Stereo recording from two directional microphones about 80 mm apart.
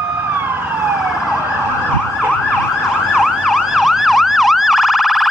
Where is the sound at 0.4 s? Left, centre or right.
Right.